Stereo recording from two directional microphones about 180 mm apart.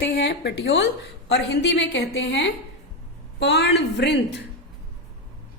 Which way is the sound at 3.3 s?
70° left (ahead or behind).